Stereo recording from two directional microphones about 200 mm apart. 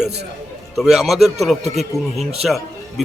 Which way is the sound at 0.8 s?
Centre (ahead or behind).